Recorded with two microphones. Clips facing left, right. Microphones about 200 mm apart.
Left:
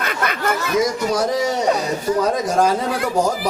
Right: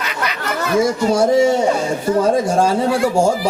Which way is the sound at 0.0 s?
50° left (ahead or behind).